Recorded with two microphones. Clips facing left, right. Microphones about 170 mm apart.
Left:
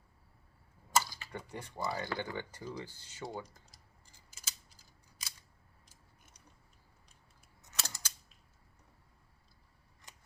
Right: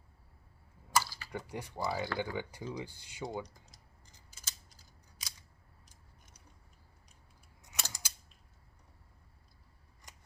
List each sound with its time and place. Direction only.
0.9 s typing: 20° left (ahead or behind)
1.3 s speech: 10° right (ahead or behind)
7.7 s a sound: 15° right (ahead or behind)